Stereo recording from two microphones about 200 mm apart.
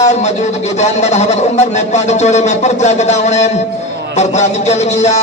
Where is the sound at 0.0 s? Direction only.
35° left (ahead or behind).